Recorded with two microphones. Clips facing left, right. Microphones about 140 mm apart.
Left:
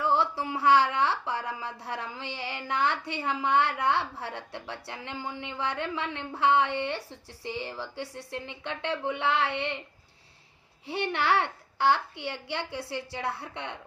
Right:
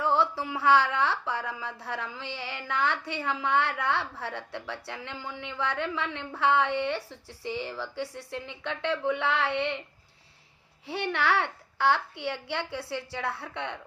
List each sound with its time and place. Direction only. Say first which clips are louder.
0.2 s speech: right 1 dB; 20° left (ahead or behind)
10.8 s a child's voice: even; 20° left (ahead or behind)